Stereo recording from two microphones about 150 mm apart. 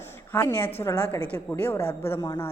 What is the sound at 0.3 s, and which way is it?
A woman's voice, 15° left (ahead or behind).